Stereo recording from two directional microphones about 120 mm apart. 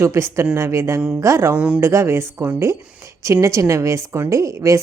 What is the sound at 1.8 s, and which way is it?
A woman's voice, 25° right (ahead or behind).